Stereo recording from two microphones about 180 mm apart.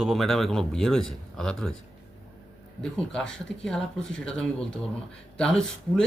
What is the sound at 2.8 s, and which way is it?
Speech, 5° left (ahead or behind).